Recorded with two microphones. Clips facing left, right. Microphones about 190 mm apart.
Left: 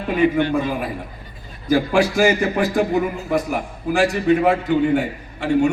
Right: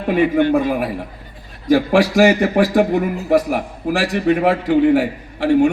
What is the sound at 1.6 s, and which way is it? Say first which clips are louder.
A man's voice: right 3 dB; 80° right.